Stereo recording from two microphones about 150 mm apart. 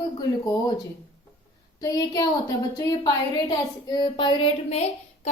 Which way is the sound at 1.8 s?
25° left (ahead or behind).